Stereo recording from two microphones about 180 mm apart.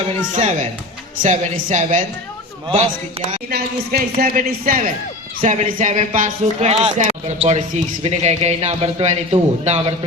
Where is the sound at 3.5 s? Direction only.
55° right (ahead or behind).